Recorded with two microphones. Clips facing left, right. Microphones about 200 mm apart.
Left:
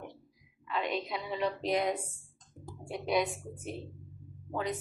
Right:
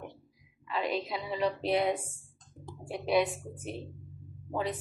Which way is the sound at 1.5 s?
30° right (ahead or behind).